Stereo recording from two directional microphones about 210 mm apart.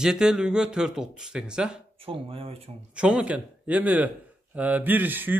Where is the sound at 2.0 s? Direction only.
25° right (ahead or behind).